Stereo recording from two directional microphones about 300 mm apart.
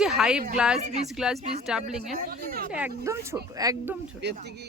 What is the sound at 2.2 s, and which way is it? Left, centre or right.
Speech, right.